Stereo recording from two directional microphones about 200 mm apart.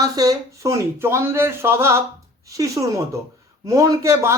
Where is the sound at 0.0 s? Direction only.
15° right (ahead or behind).